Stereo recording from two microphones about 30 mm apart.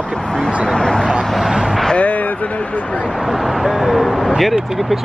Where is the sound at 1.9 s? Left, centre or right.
Left.